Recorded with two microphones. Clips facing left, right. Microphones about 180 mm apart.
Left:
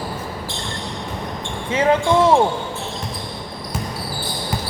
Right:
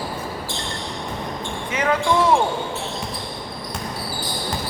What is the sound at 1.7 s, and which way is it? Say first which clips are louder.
Speech: left 4 dB; 30° left (ahead or behind).